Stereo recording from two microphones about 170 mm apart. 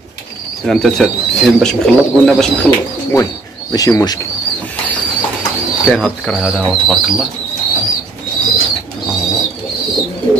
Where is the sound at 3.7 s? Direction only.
20° left (ahead or behind).